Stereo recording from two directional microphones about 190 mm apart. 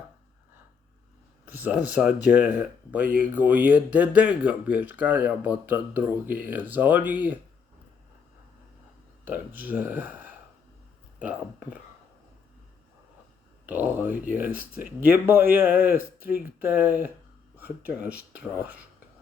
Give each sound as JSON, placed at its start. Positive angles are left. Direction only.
{"t": 1.5, "sound": "speech", "side_deg": -10}
{"t": 9.2, "sound": "speech", "side_deg": -10}
{"t": 13.7, "sound": "speech", "side_deg": -10}